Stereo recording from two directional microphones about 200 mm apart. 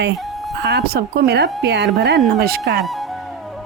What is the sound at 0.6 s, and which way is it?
Speech, 55° right (ahead or behind).